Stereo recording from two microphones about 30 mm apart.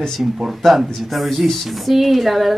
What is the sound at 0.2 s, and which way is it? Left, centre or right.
Speech, centre.